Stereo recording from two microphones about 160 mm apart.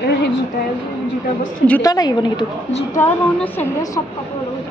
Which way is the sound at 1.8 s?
25° left (ahead or behind).